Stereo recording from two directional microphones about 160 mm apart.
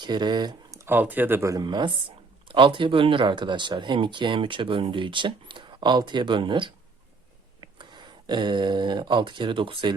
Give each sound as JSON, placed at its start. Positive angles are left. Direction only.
{"t": 0.0, "sound": "speech", "side_deg": -30}
{"t": 7.8, "sound": "speech", "side_deg": -30}